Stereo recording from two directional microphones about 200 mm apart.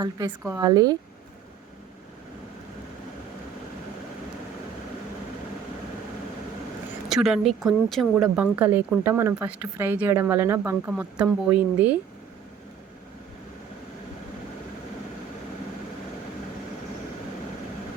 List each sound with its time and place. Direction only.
0.0 s speech: 20° right (ahead or behind)
7.1 s speech: centre (ahead or behind)